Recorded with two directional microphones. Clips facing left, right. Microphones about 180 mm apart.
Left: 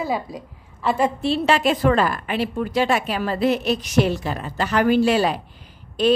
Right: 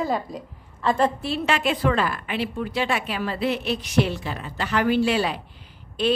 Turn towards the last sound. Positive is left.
turn(degrees=40)  # may be behind; listen again after turning